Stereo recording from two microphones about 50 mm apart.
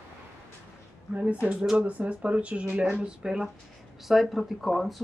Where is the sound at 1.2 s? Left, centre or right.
Right.